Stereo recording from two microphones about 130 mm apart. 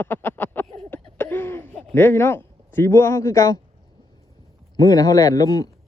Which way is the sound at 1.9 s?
20° left (ahead or behind).